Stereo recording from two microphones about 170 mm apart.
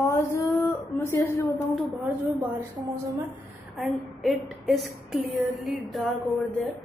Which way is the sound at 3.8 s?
Centre (ahead or behind).